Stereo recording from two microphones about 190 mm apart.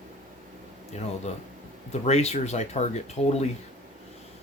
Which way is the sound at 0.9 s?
35° left (ahead or behind).